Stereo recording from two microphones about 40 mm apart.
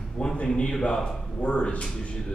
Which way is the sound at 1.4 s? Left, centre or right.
Left.